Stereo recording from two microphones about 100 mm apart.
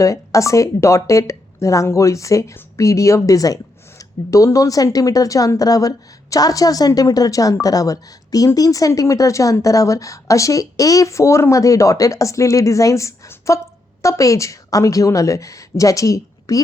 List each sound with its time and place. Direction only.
0.0 s speech: 30° left (ahead or behind)